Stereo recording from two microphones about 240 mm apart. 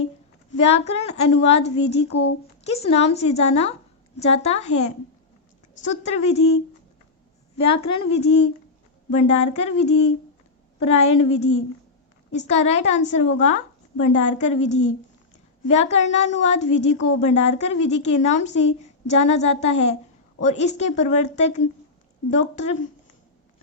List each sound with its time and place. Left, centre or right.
0.5 s a woman's voice: left
7.6 s a woman's voice: left